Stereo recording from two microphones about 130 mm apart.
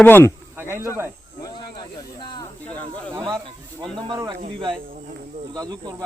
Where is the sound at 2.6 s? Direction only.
10° left (ahead or behind).